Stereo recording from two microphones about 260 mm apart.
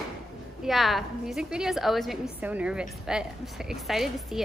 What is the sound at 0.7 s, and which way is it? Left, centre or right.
A woman's voice, centre.